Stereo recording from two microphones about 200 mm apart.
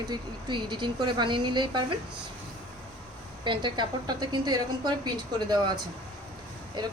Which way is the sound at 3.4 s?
25° right (ahead or behind).